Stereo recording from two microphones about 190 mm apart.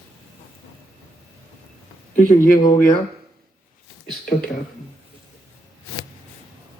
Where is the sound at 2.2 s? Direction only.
50° left (ahead or behind).